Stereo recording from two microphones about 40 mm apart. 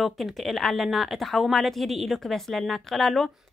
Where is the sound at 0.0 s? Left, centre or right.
Centre.